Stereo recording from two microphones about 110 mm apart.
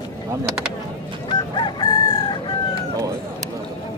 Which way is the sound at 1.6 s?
45° left (ahead or behind).